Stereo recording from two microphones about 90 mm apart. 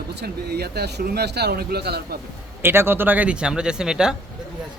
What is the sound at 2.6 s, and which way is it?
A man's voice, 25° right (ahead or behind).